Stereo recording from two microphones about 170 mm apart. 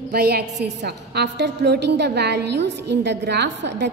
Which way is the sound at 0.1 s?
70° right (ahead or behind).